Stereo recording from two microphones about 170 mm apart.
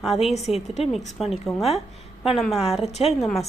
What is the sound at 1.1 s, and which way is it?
A woman's voice, centre (ahead or behind).